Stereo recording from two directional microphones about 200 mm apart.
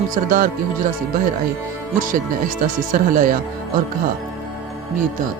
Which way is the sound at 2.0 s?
40° right (ahead or behind).